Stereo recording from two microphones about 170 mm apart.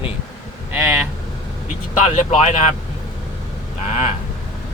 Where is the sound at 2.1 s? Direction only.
45° left (ahead or behind).